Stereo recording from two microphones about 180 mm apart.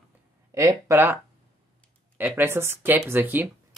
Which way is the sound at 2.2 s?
10° right (ahead or behind).